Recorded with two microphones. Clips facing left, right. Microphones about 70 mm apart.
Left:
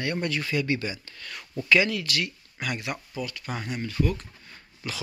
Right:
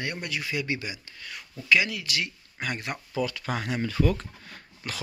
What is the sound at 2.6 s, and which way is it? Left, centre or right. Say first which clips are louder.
Speech: left 1 dB; right.